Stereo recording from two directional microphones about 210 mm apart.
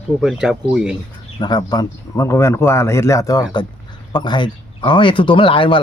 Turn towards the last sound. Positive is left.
turn(degrees=25)  # may be behind; listen again after turning